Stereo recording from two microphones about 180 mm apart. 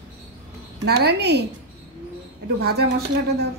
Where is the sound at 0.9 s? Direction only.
70° right (ahead or behind).